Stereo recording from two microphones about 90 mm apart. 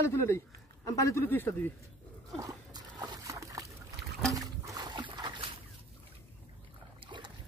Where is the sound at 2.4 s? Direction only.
45° right (ahead or behind).